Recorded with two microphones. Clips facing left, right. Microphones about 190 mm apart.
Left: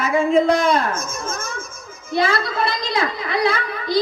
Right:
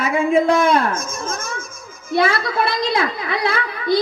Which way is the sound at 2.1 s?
55° right (ahead or behind).